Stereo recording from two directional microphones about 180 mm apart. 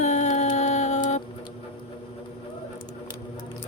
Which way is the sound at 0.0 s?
40° left (ahead or behind).